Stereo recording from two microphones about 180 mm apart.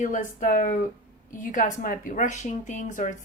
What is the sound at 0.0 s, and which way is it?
A woman's voice, 45° left (ahead or behind).